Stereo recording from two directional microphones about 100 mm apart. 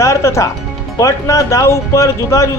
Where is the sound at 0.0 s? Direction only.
30° left (ahead or behind).